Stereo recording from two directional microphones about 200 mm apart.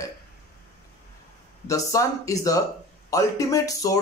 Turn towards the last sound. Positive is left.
turn(degrees=15)  # may be behind; listen again after turning